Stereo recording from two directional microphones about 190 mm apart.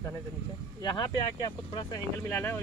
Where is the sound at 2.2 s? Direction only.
10° left (ahead or behind).